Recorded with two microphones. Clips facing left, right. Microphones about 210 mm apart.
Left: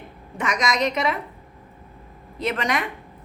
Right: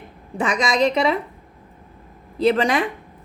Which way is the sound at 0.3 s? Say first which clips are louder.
Right 4 dB; 30° right (ahead or behind).